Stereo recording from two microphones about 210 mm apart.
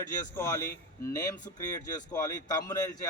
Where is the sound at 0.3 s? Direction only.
10° left (ahead or behind).